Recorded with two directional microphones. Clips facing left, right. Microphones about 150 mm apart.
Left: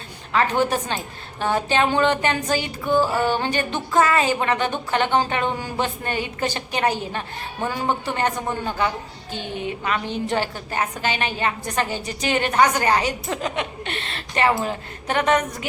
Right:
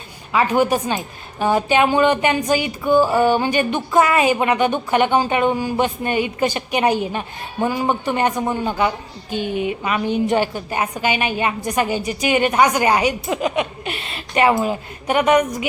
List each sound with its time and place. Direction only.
0.3 s a woman's voice: 10° right (ahead or behind)